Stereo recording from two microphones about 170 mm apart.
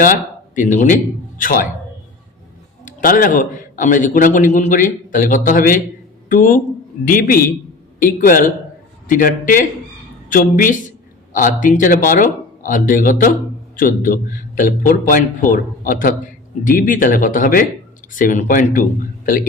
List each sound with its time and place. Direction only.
0.0 s a man's voice: 50° left (ahead or behind)
2.8 s a man's voice: 55° left (ahead or behind)